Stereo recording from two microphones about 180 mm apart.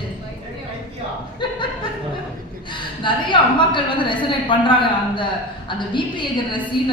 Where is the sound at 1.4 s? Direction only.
25° left (ahead or behind).